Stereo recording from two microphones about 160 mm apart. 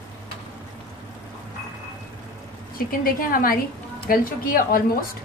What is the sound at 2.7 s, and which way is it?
A woman's voice, 65° left (ahead or behind).